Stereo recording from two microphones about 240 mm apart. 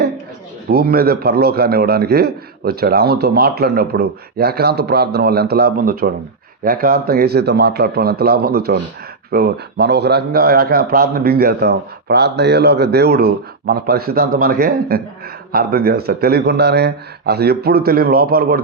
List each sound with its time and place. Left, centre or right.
0.7 s a man's voice: right